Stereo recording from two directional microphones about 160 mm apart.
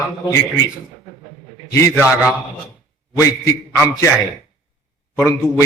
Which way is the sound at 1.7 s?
20° left (ahead or behind).